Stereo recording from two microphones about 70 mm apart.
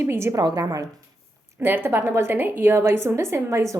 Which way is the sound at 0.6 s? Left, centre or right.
Right.